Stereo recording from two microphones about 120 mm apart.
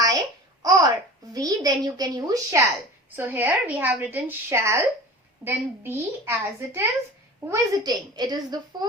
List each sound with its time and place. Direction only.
0.6 s babbling: 30° right (ahead or behind)
1.3 s a woman's voice: 30° right (ahead or behind)
3.2 s a woman's voice: 15° right (ahead or behind)
7.4 s a child's voice: 30° right (ahead or behind)